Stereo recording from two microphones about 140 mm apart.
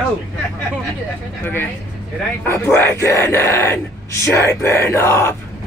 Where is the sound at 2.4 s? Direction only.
15° left (ahead or behind).